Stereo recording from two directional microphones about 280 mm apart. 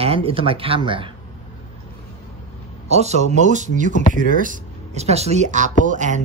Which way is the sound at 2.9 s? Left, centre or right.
Right.